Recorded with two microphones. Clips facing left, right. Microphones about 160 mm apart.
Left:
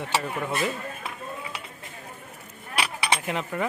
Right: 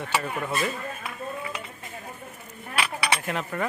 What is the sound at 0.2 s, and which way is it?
Speech, 10° left (ahead or behind).